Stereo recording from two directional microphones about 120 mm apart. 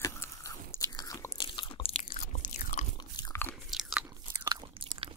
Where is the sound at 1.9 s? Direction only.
65° left (ahead or behind); by 2.8 s 90° left.